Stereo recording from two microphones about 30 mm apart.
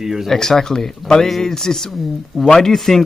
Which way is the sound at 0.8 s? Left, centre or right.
Centre.